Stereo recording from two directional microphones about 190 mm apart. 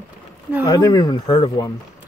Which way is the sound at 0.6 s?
20° left (ahead or behind).